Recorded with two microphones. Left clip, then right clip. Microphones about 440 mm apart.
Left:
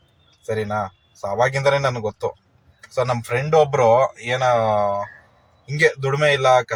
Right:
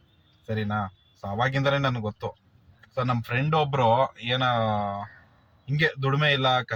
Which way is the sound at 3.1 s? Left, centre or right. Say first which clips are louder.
Left 7 dB; right.